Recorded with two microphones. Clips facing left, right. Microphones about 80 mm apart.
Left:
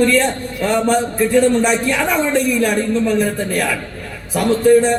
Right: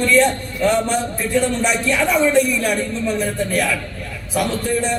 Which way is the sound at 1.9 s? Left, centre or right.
Left.